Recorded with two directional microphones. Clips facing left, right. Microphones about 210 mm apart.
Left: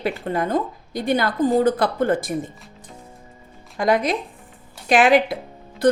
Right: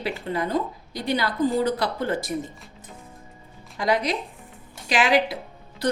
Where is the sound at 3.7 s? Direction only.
50° left (ahead or behind).